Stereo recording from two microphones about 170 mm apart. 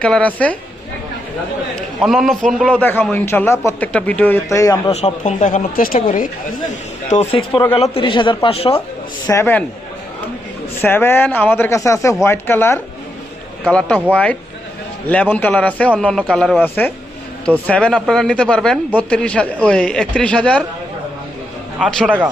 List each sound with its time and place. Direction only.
0.0 s a man's voice: 5° left (ahead or behind)
1.7 s a sound: centre (ahead or behind)
2.5 s a man's voice: 5° left (ahead or behind)
4.9 s speech: 40° left (ahead or behind)
7.1 s a man's voice: 35° left (ahead or behind)
9.2 s a man's voice: 15° left (ahead or behind)
10.8 s a man's voice: 15° left (ahead or behind)
21.8 s a man's voice: centre (ahead or behind)